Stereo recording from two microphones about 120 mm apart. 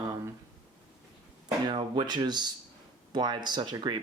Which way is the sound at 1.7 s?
40° right (ahead or behind).